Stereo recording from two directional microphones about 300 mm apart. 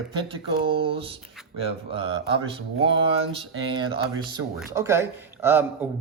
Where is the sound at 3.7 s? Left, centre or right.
Centre.